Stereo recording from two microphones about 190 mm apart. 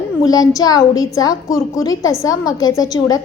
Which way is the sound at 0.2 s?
20° left (ahead or behind).